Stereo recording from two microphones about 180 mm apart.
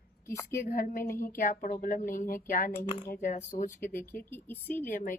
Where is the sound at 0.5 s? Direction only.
50° left (ahead or behind).